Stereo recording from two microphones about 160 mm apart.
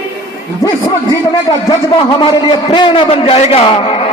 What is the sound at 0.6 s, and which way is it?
A man's voice, 20° left (ahead or behind).